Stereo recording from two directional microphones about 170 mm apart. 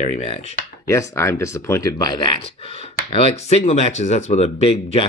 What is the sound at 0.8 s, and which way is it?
Speech, 20° left (ahead or behind).